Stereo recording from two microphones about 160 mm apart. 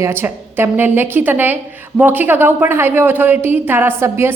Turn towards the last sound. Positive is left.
turn(degrees=-15)  # may be behind; listen again after turning